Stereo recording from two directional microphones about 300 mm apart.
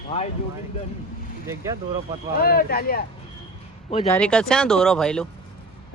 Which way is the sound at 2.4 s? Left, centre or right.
Left.